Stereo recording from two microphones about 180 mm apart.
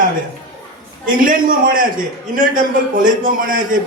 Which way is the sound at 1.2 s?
50° right (ahead or behind).